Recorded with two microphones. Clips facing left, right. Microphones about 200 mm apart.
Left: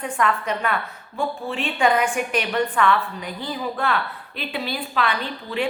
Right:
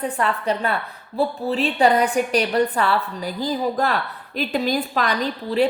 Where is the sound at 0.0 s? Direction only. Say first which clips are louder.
Right 1 dB; 35° right (ahead or behind).